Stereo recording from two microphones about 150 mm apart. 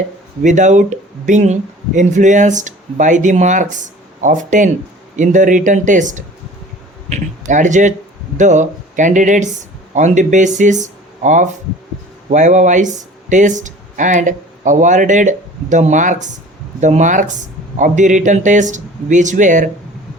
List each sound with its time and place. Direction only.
0.4 s speech: 55° right (ahead or behind)